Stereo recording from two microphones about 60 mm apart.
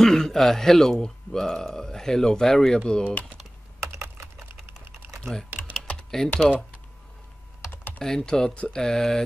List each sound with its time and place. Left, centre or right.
0.0 s speech: centre
3.8 s typing: right
5.7 s typing: centre
7.7 s typing: left
8.0 s speech: centre